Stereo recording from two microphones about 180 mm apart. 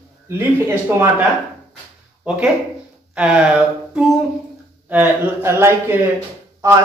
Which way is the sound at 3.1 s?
5° right (ahead or behind).